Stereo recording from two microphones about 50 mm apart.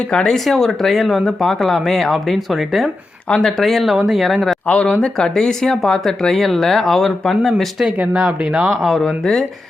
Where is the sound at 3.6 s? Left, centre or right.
Centre.